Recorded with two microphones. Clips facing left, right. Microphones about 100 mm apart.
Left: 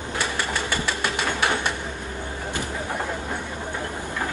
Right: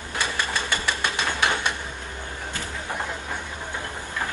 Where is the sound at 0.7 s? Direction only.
20° right (ahead or behind).